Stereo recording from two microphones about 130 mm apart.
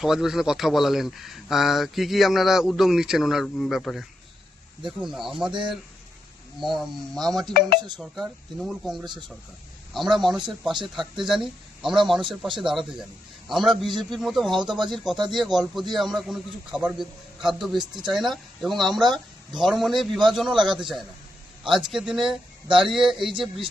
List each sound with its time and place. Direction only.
0.0 s speech: 5° right (ahead or behind)
3.4 s speech: 10° left (ahead or behind)
5.5 s speech: 35° right (ahead or behind)
6.6 s speech: centre (ahead or behind)
8.5 s speech: centre (ahead or behind)